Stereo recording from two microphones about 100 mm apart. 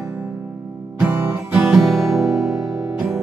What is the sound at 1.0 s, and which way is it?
Music, 10° right (ahead or behind).